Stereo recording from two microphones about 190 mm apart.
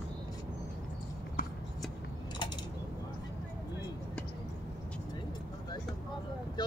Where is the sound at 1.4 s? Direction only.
50° left (ahead or behind).